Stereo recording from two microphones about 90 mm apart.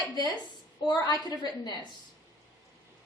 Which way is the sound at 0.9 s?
45° left (ahead or behind).